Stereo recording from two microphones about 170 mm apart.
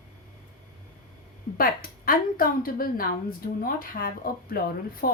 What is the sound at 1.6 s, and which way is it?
A woman's voice, 60° left (ahead or behind).